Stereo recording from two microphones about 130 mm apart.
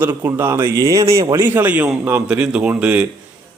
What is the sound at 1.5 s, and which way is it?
A man's voice, 15° right (ahead or behind).